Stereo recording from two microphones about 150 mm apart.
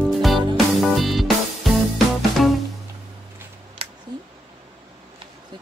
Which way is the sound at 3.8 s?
40° right (ahead or behind).